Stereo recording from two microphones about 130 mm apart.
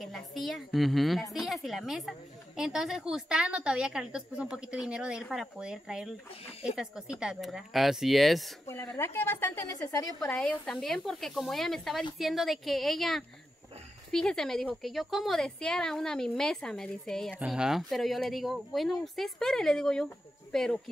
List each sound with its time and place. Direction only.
0.0 s a woman's voice: centre (ahead or behind)
8.9 s a woman's voice: 20° left (ahead or behind)
10.3 s a woman's voice: 5° left (ahead or behind)